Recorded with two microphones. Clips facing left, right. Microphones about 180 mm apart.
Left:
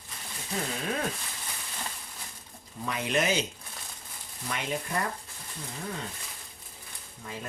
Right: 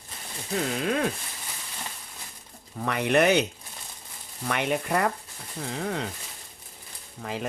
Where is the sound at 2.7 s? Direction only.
65° right (ahead or behind).